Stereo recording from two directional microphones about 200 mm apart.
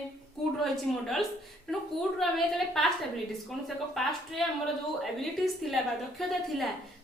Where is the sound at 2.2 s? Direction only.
Centre (ahead or behind).